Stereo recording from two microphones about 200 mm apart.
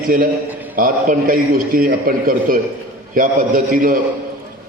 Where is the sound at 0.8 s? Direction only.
45° right (ahead or behind).